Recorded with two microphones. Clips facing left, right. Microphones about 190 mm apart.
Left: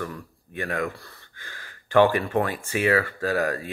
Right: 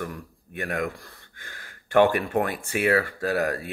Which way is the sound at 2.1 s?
10° right (ahead or behind).